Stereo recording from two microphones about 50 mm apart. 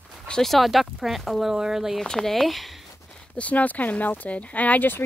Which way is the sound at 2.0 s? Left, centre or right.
Centre.